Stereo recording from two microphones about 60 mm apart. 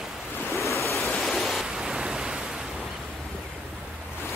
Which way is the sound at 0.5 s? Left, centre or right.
Left.